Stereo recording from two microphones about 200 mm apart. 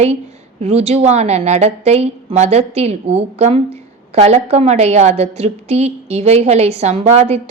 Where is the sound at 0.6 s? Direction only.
30° right (ahead or behind).